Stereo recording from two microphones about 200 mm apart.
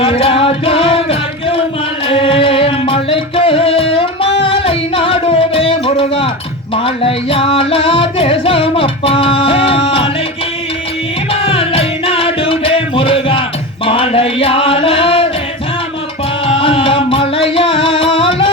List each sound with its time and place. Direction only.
0.0 s music: 25° left (ahead or behind)
11.3 s music: 30° left (ahead or behind)
13.8 s chant: 25° left (ahead or behind)
16.5 s music: 30° left (ahead or behind)